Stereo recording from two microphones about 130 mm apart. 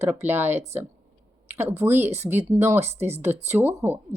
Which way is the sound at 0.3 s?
15° right (ahead or behind).